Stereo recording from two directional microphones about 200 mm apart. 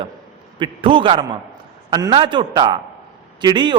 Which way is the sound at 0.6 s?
25° right (ahead or behind).